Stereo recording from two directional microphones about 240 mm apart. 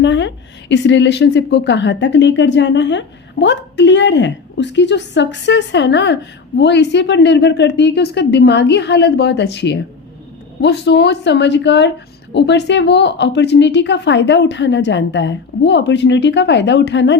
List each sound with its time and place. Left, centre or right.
0.0 s a woman's voice: left